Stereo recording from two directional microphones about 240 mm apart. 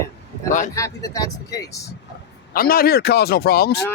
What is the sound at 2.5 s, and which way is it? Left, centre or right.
Speech, left.